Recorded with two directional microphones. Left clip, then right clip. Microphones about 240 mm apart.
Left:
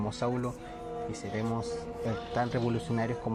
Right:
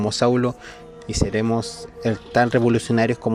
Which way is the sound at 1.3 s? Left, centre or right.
Right.